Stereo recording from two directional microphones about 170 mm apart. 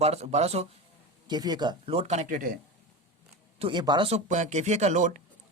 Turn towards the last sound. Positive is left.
turn(degrees=-45)  # may be behind; listen again after turning